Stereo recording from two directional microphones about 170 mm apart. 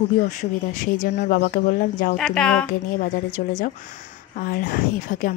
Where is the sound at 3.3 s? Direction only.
50° left (ahead or behind).